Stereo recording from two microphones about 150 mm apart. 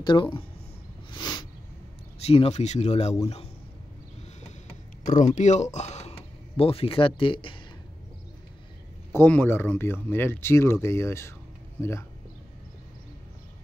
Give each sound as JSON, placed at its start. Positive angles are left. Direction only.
{"t": 0.0, "sound": "speech", "side_deg": 30}
{"t": 1.1, "sound": "a sound", "side_deg": 30}
{"t": 2.1, "sound": "speech", "side_deg": 40}
{"t": 5.0, "sound": "speech", "side_deg": 55}
{"t": 9.1, "sound": "speech", "side_deg": 15}